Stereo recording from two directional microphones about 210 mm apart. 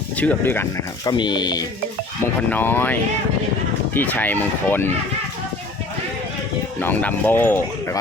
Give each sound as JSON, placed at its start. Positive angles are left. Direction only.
{"t": 0.2, "sound": "speech", "side_deg": 10}
{"t": 1.1, "sound": "speech", "side_deg": 20}
{"t": 2.5, "sound": "speech", "side_deg": 10}
{"t": 6.7, "sound": "speech", "side_deg": 10}